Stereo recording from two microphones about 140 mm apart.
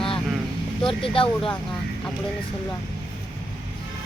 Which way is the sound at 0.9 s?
40° left (ahead or behind).